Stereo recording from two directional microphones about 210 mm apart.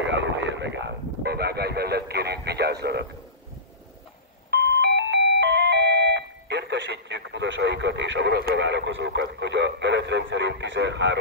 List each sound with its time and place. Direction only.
0.0 s speech: 60° right (ahead or behind)
4.5 s doorbell: 50° right (ahead or behind)